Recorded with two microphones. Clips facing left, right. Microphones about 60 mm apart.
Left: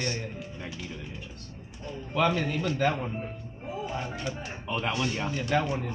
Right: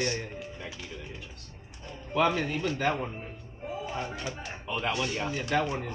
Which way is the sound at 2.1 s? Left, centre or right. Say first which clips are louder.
Even; centre.